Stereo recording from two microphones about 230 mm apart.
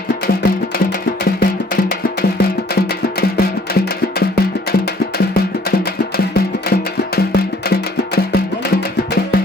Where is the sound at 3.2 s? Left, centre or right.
Left.